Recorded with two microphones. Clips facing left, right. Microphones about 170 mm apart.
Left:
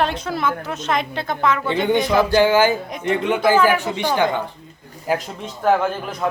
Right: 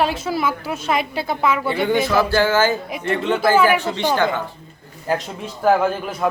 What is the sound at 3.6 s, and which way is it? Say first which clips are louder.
Speech: right 3 dB; 10° right (ahead or behind).